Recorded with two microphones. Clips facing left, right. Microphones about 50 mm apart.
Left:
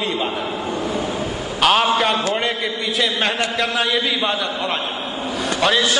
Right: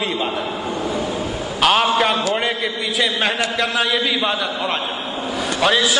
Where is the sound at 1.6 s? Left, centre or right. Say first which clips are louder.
Even; centre.